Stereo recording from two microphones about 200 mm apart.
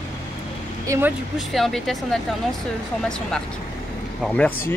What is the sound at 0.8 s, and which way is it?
Speech, 15° right (ahead or behind).